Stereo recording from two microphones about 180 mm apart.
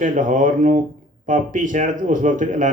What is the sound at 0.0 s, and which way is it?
Speech, 45° right (ahead or behind).